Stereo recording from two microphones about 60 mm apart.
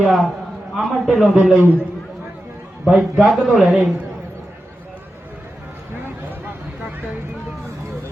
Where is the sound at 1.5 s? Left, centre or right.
Right.